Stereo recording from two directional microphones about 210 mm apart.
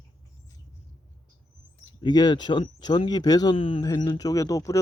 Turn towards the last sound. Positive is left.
turn(degrees=15)  # may be behind; listen again after turning